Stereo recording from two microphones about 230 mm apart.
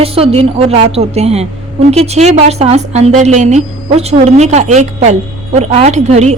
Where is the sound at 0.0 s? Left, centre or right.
Right.